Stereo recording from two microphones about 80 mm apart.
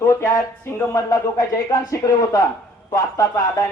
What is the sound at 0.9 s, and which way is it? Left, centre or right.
Speech, left.